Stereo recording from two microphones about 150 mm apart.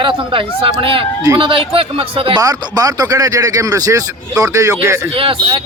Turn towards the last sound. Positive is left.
turn(degrees=-35)  # may be behind; listen again after turning